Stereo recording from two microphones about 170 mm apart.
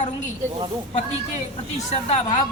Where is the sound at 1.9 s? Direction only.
40° left (ahead or behind).